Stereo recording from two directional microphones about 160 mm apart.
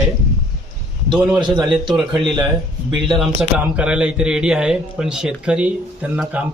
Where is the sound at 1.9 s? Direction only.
Centre (ahead or behind).